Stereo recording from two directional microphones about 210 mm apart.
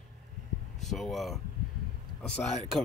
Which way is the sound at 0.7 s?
Centre (ahead or behind).